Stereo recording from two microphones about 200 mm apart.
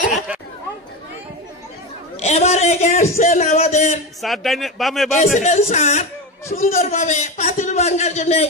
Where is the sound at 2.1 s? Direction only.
35° left (ahead or behind).